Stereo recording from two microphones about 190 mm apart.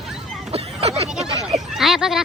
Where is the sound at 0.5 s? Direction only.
35° right (ahead or behind).